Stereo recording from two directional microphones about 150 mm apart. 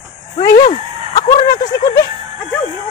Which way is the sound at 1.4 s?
25° left (ahead or behind).